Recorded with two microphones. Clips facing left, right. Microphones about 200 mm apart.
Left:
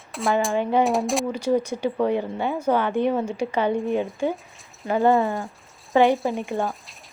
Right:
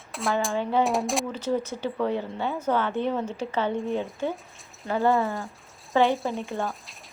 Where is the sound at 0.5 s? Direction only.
15° left (ahead or behind).